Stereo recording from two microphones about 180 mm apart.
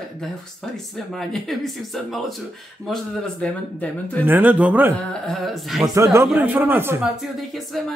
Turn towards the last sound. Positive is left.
turn(degrees=0)  # may be behind; listen again after turning